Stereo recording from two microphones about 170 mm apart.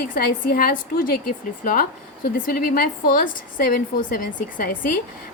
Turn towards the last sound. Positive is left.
turn(degrees=55)  # may be behind; listen again after turning